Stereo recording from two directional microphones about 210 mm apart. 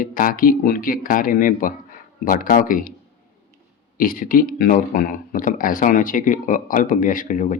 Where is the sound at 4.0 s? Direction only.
40° left (ahead or behind).